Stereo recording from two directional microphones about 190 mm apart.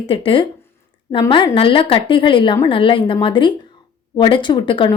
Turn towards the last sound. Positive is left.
turn(degrees=25)  # may be behind; listen again after turning